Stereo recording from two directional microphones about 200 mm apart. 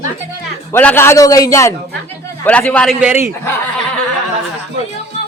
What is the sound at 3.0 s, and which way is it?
Speech, 10° right (ahead or behind).